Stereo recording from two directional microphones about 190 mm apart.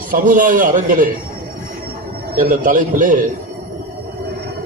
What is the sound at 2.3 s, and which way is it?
Speech, 45° right (ahead or behind).